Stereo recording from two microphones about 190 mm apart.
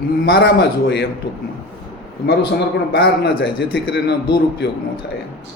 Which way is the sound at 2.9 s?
60° left (ahead or behind).